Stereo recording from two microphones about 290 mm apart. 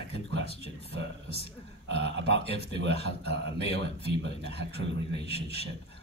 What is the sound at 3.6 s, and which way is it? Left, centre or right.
A man's voice, centre.